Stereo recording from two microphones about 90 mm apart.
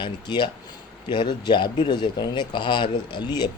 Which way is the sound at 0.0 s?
60° left (ahead or behind).